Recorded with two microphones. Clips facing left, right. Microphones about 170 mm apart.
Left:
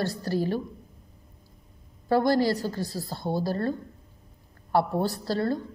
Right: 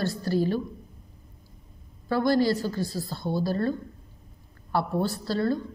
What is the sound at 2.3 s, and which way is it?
A woman's voice, 35° left (ahead or behind).